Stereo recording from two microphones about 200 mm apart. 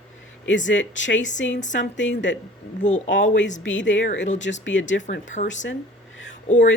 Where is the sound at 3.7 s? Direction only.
70° left (ahead or behind).